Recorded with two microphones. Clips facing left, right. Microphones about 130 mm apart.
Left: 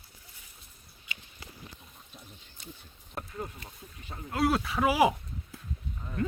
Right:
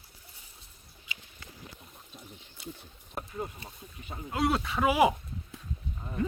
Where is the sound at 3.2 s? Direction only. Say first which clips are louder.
Right 2 dB; 15° right (ahead or behind).